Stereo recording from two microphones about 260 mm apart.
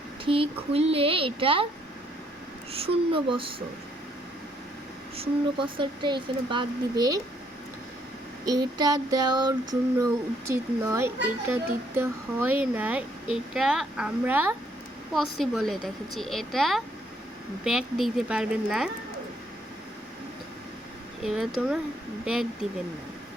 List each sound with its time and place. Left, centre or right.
0.3 s speech: right
2.7 s speech: right
5.1 s speech: right
8.4 s a child's voice: centre
21.2 s speech: centre